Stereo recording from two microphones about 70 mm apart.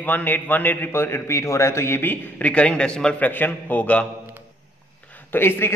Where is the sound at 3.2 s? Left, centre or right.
Left.